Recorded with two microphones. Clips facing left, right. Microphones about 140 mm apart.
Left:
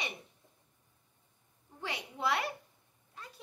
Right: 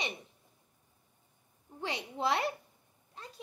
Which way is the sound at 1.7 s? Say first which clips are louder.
Right 3 dB; 25° right (ahead or behind).